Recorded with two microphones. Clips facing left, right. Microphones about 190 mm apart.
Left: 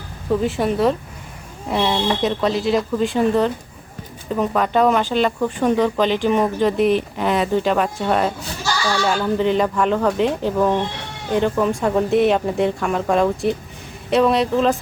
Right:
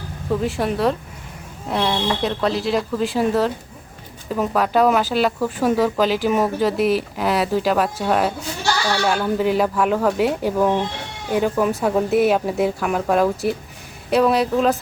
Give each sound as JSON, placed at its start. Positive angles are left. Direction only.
{"t": 0.3, "sound": "speech", "side_deg": 0}